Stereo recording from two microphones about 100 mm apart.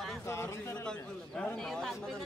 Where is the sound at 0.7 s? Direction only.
10° left (ahead or behind).